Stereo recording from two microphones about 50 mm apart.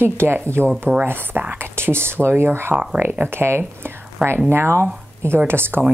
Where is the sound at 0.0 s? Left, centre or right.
Right.